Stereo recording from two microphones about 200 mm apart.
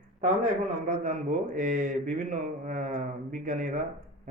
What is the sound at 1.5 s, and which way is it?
Speech, 40° right (ahead or behind).